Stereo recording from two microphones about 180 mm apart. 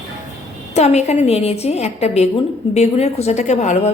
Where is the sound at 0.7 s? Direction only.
35° left (ahead or behind).